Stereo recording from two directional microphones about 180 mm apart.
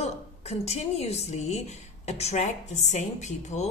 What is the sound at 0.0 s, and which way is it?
A woman's voice, 35° left (ahead or behind).